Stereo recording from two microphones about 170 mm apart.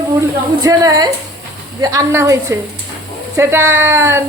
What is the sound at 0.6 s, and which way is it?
A woman's voice, 20° right (ahead or behind).